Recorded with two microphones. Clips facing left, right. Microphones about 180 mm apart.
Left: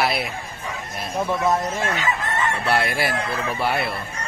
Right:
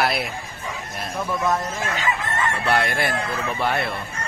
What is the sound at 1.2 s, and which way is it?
Speech, 30° left (ahead or behind).